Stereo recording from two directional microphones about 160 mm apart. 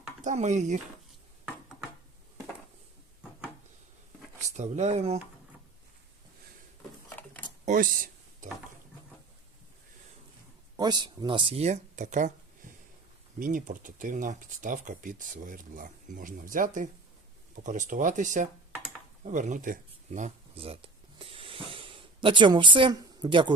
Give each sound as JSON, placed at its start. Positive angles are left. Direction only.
{"t": 0.2, "sound": "speech", "side_deg": -50}
{"t": 4.4, "sound": "speech", "side_deg": -45}
{"t": 7.6, "sound": "a sound", "side_deg": -55}
{"t": 10.8, "sound": "speech", "side_deg": -25}
{"t": 13.4, "sound": "speech", "side_deg": -55}
{"t": 19.2, "sound": "a sound", "side_deg": -50}